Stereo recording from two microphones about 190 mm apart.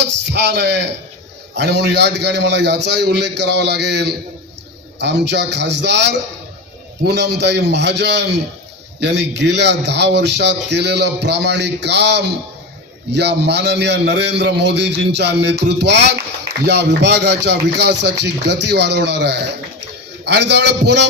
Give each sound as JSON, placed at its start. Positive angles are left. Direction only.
{"t": 0.0, "sound": "a man's voice", "side_deg": -65}